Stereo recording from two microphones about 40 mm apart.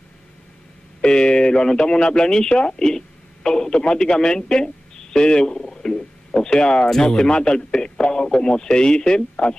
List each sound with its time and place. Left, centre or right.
1.0 s speech: left